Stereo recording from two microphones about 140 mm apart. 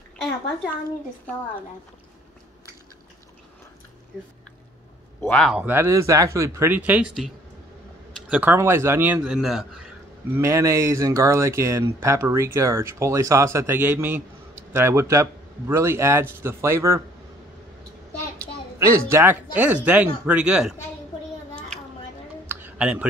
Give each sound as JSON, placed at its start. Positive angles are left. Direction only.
{"t": 5.2, "sound": "a man's voice", "side_deg": 10}
{"t": 5.5, "sound": "a man's voice", "side_deg": -15}
{"t": 6.7, "sound": "speech", "side_deg": -10}
{"t": 8.3, "sound": "speech", "side_deg": -10}
{"t": 9.2, "sound": "a man's voice", "side_deg": -5}
{"t": 10.3, "sound": "a man's voice", "side_deg": -20}
{"t": 18.8, "sound": "speech", "side_deg": -20}
{"t": 22.5, "sound": "a sound", "side_deg": -15}